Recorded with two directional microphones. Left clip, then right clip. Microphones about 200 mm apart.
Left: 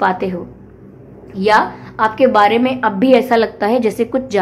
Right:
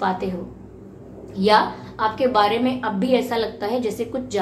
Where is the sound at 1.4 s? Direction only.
45° left (ahead or behind).